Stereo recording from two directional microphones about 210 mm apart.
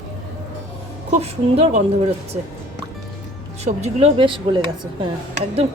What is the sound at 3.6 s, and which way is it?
Speech, 30° right (ahead or behind).